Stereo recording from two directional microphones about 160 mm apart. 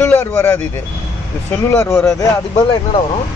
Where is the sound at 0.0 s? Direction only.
15° left (ahead or behind).